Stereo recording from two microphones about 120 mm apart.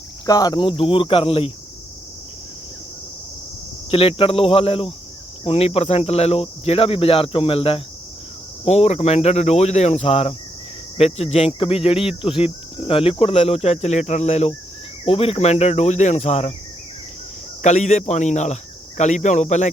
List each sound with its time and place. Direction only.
0.3 s speech: 30° left (ahead or behind); by 1.5 s 50° left (ahead or behind)
3.9 s speech: 55° left (ahead or behind)
8.6 s speech: 60° left (ahead or behind)
15.0 s speech: 55° left (ahead or behind)
17.6 s speech: 75° left (ahead or behind)